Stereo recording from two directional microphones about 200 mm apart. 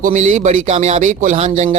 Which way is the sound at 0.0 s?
40° right (ahead or behind).